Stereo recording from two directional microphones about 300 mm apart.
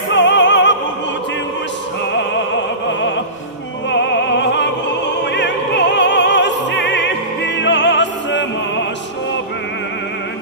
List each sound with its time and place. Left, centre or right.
0.1 s opera: left
3.9 s music: left
5.3 s opera: left